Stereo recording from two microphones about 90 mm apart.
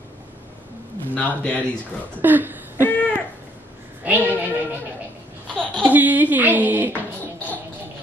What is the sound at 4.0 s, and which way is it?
Speech, 20° right (ahead or behind).